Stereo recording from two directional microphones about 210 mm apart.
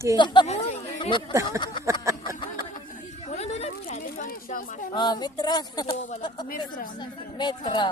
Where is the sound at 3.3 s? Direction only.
30° left (ahead or behind).